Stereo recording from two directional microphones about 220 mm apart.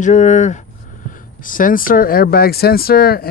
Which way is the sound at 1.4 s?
40° left (ahead or behind).